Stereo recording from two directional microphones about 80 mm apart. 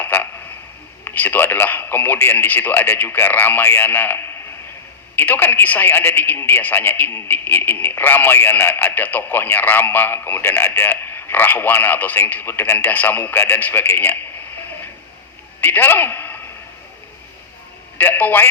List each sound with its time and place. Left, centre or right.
0.0 s a sound: left
1.0 s speech: left
15.6 s a man's voice: left
17.9 s a man's voice: left